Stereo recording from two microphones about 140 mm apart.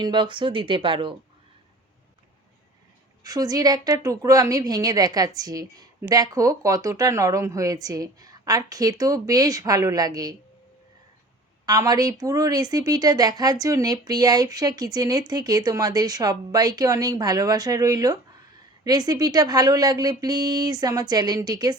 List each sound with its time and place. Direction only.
0.0 s speech: 35° right (ahead or behind)
3.2 s a woman's voice: 25° right (ahead or behind)
11.6 s a woman's voice: 25° right (ahead or behind)